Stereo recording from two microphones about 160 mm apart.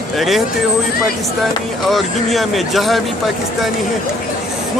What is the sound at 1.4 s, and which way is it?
Speech, centre (ahead or behind).